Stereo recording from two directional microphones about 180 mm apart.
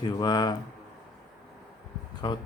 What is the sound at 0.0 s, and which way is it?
Speech, 25° left (ahead or behind).